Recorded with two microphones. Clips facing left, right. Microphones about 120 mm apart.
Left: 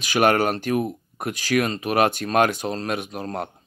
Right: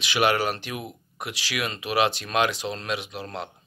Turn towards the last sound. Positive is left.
turn(degrees=45)  # may be behind; listen again after turning